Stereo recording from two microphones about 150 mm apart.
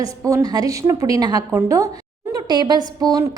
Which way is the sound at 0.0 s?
20° right (ahead or behind).